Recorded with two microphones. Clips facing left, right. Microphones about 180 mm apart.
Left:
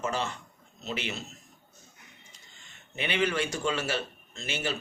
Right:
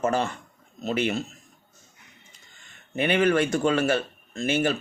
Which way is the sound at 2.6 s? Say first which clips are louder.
Right 9 dB; 50° right (ahead or behind).